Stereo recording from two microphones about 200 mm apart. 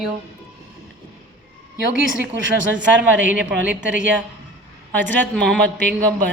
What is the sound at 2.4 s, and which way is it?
Speech, 70° right (ahead or behind).